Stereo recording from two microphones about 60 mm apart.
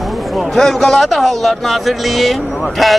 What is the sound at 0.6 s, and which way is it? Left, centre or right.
Speech, centre.